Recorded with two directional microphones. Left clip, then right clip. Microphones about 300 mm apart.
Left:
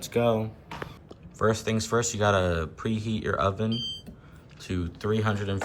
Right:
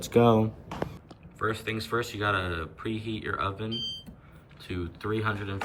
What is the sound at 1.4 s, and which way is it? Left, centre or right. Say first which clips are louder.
Speech: left 5 dB; centre.